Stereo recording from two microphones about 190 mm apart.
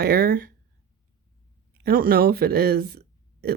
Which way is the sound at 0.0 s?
50° right (ahead or behind).